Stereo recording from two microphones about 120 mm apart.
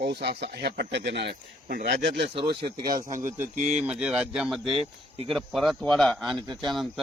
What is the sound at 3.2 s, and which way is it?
Speech, 90° right.